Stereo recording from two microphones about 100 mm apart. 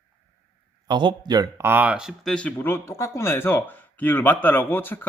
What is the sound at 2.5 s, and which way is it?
A man's voice, 25° left (ahead or behind).